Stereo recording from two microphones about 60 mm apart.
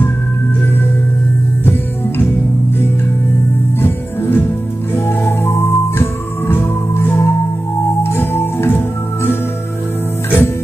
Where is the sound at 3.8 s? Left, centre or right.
Left.